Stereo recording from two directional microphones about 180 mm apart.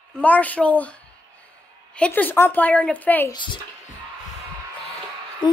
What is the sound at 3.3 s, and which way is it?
Speech, 25° left (ahead or behind).